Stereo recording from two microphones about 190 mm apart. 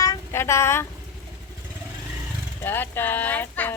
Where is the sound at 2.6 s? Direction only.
10° left (ahead or behind).